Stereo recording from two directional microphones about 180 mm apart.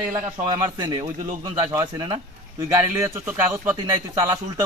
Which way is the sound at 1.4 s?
15° right (ahead or behind).